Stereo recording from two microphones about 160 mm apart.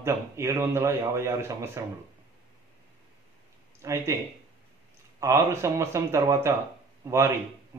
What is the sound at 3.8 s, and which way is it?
Speech, 15° right (ahead or behind).